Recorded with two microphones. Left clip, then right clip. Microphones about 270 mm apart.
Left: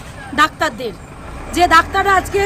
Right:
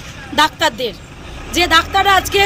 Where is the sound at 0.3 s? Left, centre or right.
Centre.